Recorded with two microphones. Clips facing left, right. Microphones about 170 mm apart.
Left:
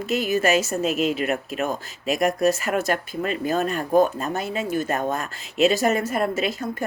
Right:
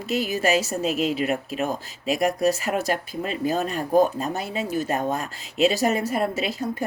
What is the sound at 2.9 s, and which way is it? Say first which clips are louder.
Speech: left 2 dB; 50° left (ahead or behind).